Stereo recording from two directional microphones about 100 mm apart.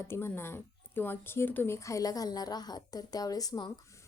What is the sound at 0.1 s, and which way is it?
Speech, 25° left (ahead or behind).